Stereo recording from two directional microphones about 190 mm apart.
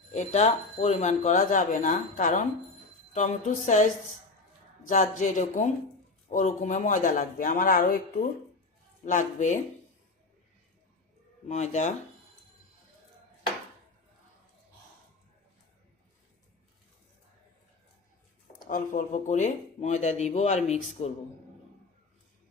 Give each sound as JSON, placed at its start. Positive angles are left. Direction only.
{"t": 0.1, "sound": "speech", "side_deg": 40}
{"t": 4.9, "sound": "speech", "side_deg": 40}
{"t": 9.0, "sound": "speech", "side_deg": 40}
{"t": 11.4, "sound": "speech", "side_deg": 35}
{"t": 18.7, "sound": "speech", "side_deg": 40}